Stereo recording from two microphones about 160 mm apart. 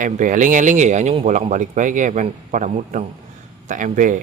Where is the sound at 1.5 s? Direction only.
50° right (ahead or behind).